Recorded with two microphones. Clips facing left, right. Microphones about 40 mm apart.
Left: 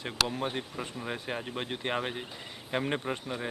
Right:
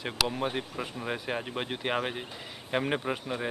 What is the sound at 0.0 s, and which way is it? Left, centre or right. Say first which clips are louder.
A man's voice: right 1 dB; centre.